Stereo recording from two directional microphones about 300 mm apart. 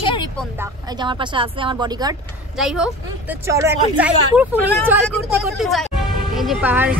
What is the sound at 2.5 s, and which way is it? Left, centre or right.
Speech, centre.